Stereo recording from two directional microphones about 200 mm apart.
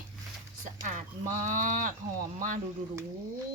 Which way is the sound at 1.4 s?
40° right (ahead or behind).